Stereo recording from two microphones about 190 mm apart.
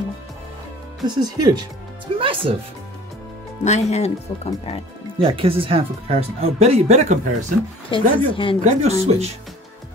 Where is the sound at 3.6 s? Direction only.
35° left (ahead or behind).